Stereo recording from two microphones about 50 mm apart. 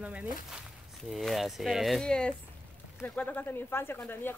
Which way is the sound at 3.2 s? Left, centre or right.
Left.